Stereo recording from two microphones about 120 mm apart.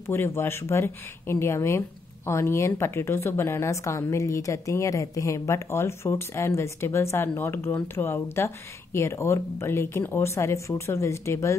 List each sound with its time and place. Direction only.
0.0 s speech: 20° left (ahead or behind)